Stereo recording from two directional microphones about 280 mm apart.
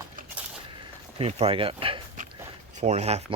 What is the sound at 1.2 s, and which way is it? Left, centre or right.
Speech, right.